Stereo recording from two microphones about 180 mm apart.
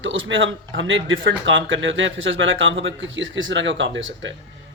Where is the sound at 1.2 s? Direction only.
80° right.